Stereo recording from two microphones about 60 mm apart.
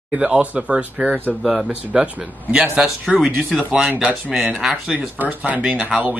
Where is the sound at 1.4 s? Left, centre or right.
Centre.